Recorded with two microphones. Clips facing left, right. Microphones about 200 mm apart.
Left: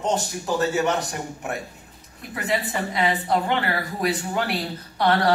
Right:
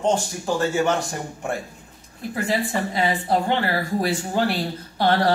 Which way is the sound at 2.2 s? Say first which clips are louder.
Right 2 dB; 30° right (ahead or behind).